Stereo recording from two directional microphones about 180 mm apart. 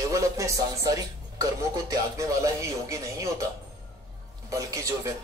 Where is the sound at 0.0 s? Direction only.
20° right (ahead or behind).